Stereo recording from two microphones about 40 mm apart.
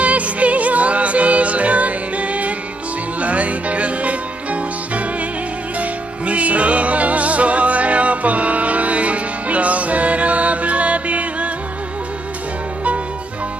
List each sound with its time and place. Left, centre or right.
0.0 s music: right